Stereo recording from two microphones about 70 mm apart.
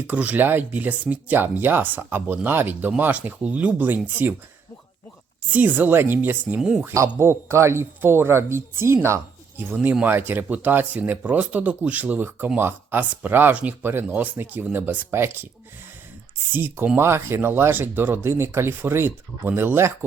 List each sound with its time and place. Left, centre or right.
0.1 s speech: right
5.5 s speech: right
6.6 s speech: centre
7.2 s speech: right
9.6 s speech: right
16.5 s speech: right
17.0 s speech: right